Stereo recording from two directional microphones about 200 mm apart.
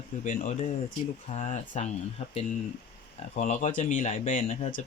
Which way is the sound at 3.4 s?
35° left (ahead or behind).